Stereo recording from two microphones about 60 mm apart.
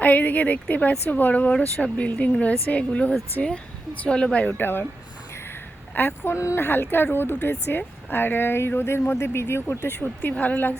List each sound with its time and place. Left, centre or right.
0.0 s a woman's voice: left
4.5 s speech: left
5.9 s speech: left
6.2 s speech: left
6.6 s speech: left